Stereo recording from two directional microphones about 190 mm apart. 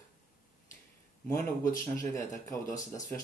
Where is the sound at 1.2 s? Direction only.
15° left (ahead or behind).